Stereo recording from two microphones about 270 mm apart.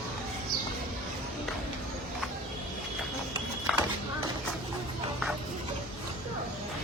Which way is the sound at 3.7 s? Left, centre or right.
Centre.